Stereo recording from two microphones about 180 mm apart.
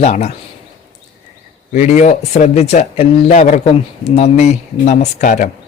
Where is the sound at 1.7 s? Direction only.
40° left (ahead or behind).